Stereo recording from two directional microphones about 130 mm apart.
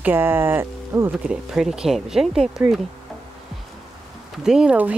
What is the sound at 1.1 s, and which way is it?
Speech, 5° right (ahead or behind).